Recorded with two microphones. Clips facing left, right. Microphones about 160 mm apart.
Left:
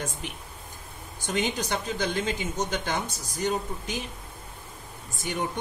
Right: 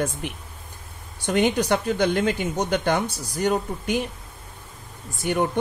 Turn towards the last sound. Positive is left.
turn(degrees=-55)  # may be behind; listen again after turning